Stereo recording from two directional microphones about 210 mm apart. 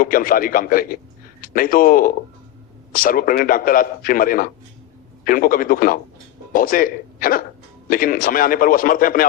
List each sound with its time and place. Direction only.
0.0 s a man's voice: 40° left (ahead or behind)